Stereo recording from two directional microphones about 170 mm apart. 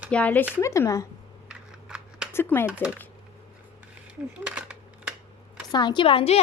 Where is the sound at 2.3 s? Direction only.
15° left (ahead or behind).